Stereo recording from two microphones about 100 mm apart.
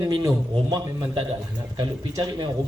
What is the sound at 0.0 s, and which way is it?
Speech, 40° right (ahead or behind).